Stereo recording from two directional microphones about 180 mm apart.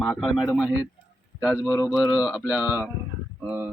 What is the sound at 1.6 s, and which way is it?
Speech, 15° left (ahead or behind).